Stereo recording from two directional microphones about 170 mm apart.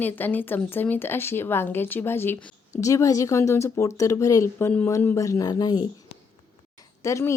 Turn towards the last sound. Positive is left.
turn(degrees=15)  # may be behind; listen again after turning